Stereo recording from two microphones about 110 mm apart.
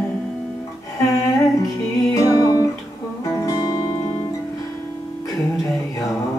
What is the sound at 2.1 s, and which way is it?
Music, 30° left (ahead or behind).